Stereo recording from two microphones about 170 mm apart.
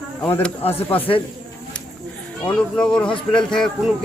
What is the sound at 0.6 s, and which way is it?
Speech, 35° left (ahead or behind).